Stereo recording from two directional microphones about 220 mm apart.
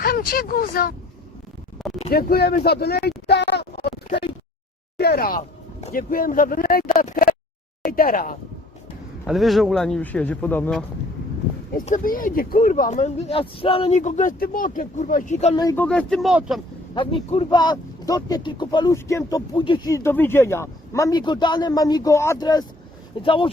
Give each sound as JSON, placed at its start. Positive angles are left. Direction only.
{"t": 0.0, "sound": "speech", "side_deg": 45}
{"t": 1.8, "sound": "a sound", "side_deg": 0}
{"t": 2.1, "sound": "speech", "side_deg": 45}
{"t": 3.8, "sound": "a sound", "side_deg": 45}
{"t": 4.9, "sound": "speech", "side_deg": 45}
{"t": 9.2, "sound": "speech", "side_deg": 0}
{"t": 11.7, "sound": "speech", "side_deg": 40}
{"t": 15.5, "sound": "speech", "side_deg": 10}
{"t": 16.9, "sound": "speech", "side_deg": 20}